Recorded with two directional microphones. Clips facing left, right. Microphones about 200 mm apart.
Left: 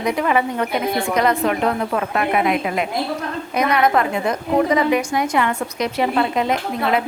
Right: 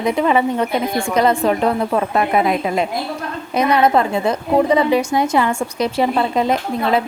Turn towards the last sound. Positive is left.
turn(degrees=-35)  # may be behind; listen again after turning